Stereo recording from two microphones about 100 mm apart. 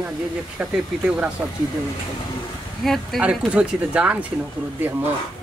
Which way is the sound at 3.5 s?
10° right (ahead or behind).